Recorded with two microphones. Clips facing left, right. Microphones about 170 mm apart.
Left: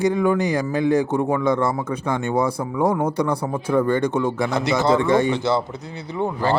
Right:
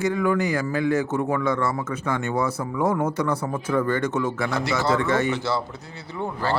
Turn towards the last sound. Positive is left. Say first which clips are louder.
# left 5 dB
turn(degrees=20)  # may be behind; listen again after turning